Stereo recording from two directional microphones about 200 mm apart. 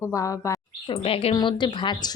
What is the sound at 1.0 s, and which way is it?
A woman's voice, 30° left (ahead or behind).